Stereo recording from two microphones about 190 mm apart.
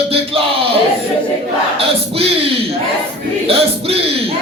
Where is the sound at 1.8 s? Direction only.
30° right (ahead or behind).